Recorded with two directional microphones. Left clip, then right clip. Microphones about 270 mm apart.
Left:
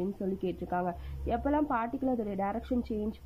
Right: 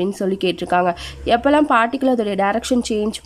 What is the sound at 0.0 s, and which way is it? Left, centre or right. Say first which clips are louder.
A woman's voice: right 15 dB; centre.